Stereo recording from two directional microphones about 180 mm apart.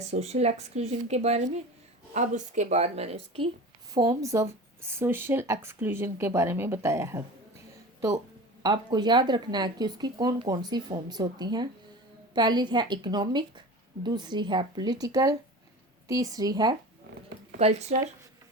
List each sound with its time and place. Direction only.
0.0 s speech: 35° right (ahead or behind)
3.9 s speech: 20° right (ahead or behind)
8.6 s speech: 25° right (ahead or behind)
17.6 s speech: 35° right (ahead or behind)